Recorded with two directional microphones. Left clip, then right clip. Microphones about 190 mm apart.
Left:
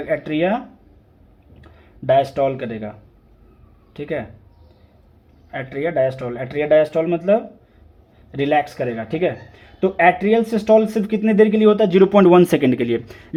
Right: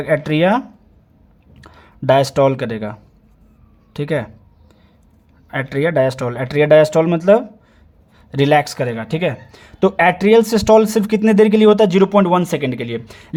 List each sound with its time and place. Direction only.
0.0 s speech: 35° right (ahead or behind)
1.6 s speech: 40° right (ahead or behind)
3.9 s speech: 40° right (ahead or behind)
5.5 s speech: 40° right (ahead or behind)
11.9 s speech: 20° right (ahead or behind)